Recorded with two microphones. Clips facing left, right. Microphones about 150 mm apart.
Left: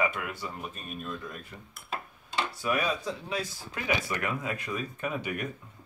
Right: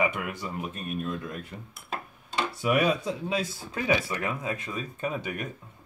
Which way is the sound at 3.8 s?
25° right (ahead or behind).